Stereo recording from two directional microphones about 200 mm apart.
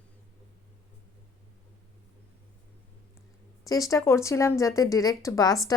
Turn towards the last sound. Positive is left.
turn(degrees=15)  # may be behind; listen again after turning